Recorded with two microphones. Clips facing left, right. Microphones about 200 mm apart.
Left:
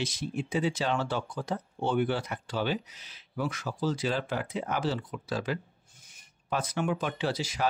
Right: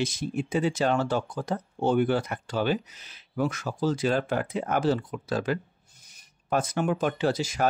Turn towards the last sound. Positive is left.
turn(degrees=-45)  # may be behind; listen again after turning